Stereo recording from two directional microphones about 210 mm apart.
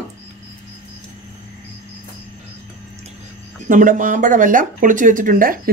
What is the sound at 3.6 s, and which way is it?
Speech, 40° right (ahead or behind).